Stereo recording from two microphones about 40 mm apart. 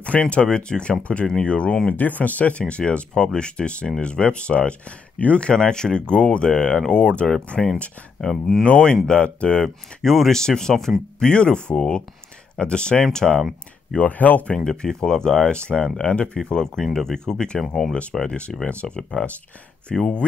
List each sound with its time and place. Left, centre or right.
0.2 s speech: left
2.0 s speech: left
5.5 s speech: centre
8.2 s speech: centre
8.6 s speech: left
10.0 s speech: centre
11.1 s speech: left
13.9 s speech: left
14.5 s speech: left
16.4 s speech: centre
17.6 s speech: centre
18.2 s speech: left